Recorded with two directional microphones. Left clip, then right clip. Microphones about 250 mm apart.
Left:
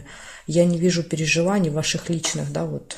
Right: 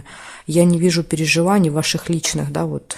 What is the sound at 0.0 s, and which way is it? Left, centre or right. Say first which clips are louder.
Speech: right 4 dB; right.